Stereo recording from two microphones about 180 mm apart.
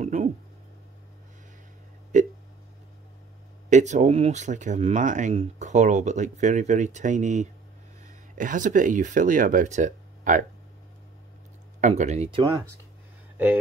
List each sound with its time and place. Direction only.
0.0 s a sound: 40° right (ahead or behind)
2.1 s hiccup: 45° right (ahead or behind)
3.7 s speech: 40° right (ahead or behind)
11.8 s speech: 40° right (ahead or behind)
12.3 s speech: 25° right (ahead or behind)